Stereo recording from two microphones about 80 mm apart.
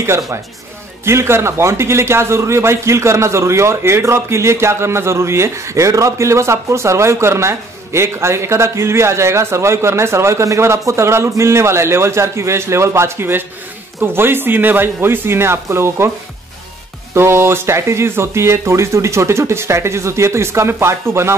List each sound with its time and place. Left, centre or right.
1.0 s speech: right
17.1 s speech: right